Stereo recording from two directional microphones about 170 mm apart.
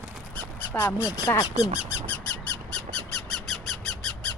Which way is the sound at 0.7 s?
15° left (ahead or behind).